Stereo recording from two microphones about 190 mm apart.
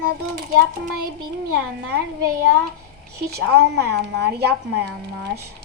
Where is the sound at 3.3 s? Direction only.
60° right (ahead or behind).